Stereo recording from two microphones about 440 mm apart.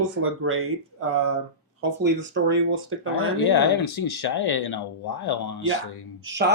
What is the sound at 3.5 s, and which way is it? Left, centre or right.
Speech, left.